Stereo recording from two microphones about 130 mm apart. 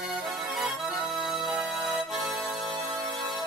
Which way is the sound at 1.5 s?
Centre (ahead or behind).